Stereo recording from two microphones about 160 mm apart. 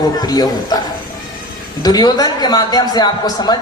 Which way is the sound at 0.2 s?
25° left (ahead or behind).